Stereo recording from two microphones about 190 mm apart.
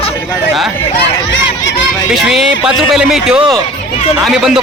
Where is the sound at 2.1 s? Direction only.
Centre (ahead or behind).